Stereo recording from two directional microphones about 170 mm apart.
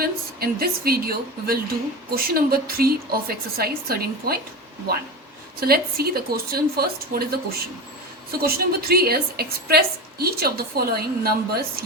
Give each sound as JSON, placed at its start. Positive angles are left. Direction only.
{"t": 0.0, "sound": "a woman's voice", "side_deg": -65}
{"t": 5.5, "sound": "a woman's voice", "side_deg": -65}